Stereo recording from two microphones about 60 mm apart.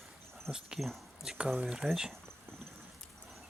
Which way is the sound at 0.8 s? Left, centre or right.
Centre.